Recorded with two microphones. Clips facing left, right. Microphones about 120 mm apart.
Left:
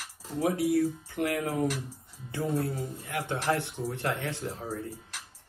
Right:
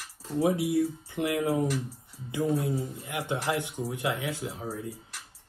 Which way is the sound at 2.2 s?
15° right (ahead or behind).